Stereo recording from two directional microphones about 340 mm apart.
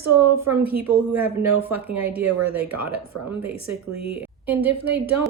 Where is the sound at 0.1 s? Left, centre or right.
Right.